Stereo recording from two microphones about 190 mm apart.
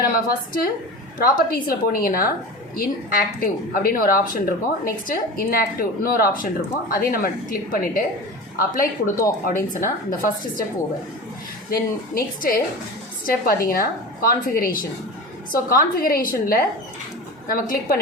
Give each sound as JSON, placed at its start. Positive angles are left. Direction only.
{"t": 0.0, "sound": "a woman's voice", "side_deg": 55}
{"t": 11.7, "sound": "a woman's voice", "side_deg": 50}